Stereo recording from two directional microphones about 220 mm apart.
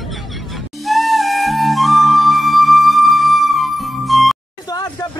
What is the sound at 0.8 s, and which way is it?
Flute, centre (ahead or behind).